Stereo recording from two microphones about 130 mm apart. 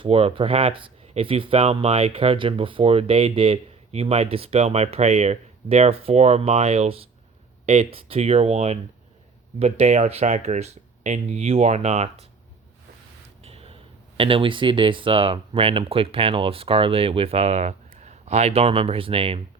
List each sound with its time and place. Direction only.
0.0 s speech: 45° right (ahead or behind)
13.4 s a sound: 50° right (ahead or behind)
14.2 s speech: 45° right (ahead or behind)